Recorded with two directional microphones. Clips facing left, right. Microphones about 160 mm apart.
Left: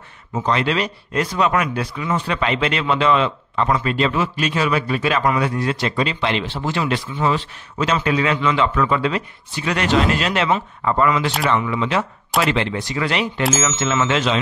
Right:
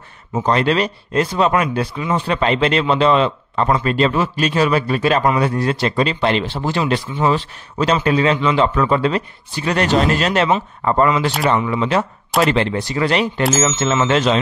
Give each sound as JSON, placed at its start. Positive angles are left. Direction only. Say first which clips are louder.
{"t": 0.3, "sound": "a man's voice", "louder": "right 3 dB", "side_deg": -40}